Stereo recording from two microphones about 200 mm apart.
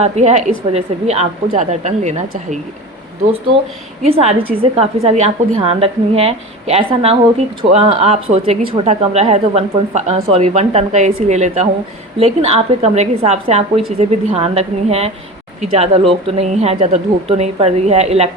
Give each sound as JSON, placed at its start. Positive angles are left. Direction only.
{"t": 0.0, "sound": "a woman's voice", "side_deg": -35}
{"t": 4.0, "sound": "a woman's voice", "side_deg": -30}